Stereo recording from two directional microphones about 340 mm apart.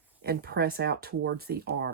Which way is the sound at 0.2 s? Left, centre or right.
Right.